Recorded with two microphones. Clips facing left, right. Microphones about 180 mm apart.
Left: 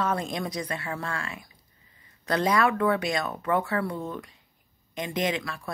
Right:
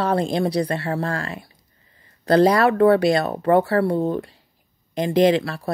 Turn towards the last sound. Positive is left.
turn(degrees=-35)  # may be behind; listen again after turning